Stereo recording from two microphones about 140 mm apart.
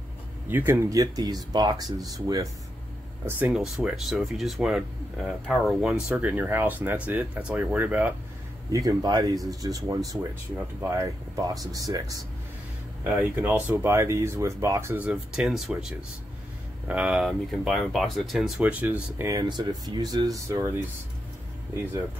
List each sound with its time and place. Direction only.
0.5 s speech: 15° right (ahead or behind)
3.3 s speech: 15° right (ahead or behind)
3.5 s speech: 5° right (ahead or behind)
8.7 s speech: 30° right (ahead or behind)
13.0 s speech: 15° right (ahead or behind)
18.6 s speech: 10° right (ahead or behind)
19.2 s speech: 25° right (ahead or behind)